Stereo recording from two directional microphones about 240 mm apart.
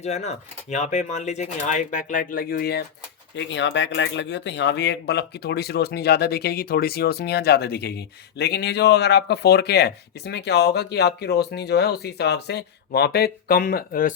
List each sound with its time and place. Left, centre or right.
0.0 s speech: left